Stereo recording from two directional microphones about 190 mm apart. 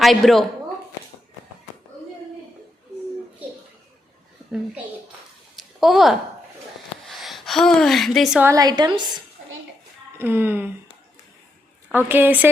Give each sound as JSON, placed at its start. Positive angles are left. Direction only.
{"t": 0.0, "sound": "a woman's voice", "side_deg": 0}
{"t": 5.5, "sound": "a sound", "side_deg": 0}
{"t": 7.1, "sound": "speech", "side_deg": 0}
{"t": 8.4, "sound": "a woman's voice", "side_deg": -20}
{"t": 10.2, "sound": "a woman's voice", "side_deg": -10}
{"t": 11.9, "sound": "a woman's voice", "side_deg": -10}